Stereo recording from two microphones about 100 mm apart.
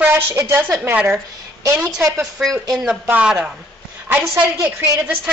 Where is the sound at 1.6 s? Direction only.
30° right (ahead or behind).